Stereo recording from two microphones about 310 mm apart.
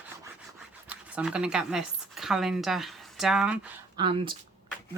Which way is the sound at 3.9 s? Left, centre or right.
Centre.